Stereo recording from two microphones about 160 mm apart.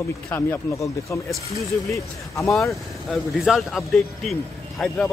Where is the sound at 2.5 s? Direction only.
Centre (ahead or behind).